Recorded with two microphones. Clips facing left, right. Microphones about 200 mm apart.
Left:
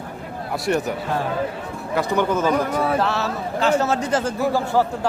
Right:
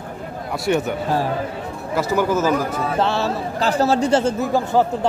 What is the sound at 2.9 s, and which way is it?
A man's voice, 25° right (ahead or behind).